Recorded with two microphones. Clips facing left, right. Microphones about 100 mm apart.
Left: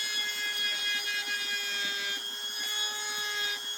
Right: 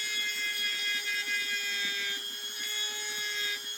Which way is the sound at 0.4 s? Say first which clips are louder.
Left 1 dB; 35° left (ahead or behind).